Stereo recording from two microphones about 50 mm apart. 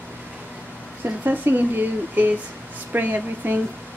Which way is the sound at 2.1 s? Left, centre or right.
Right.